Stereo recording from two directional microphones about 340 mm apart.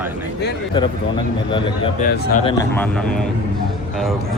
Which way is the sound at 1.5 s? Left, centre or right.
Centre.